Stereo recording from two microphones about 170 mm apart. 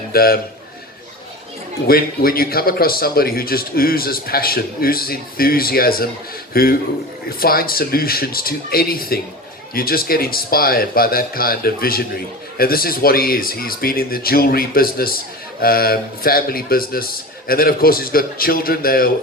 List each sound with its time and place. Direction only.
0.1 s a man's voice: 60° left (ahead or behind)
1.9 s a man's voice: 60° left (ahead or behind)